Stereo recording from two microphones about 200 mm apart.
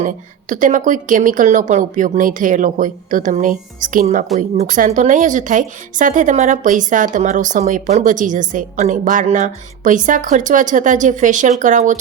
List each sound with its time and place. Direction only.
0.0 s a woman's voice: 40° right (ahead or behind)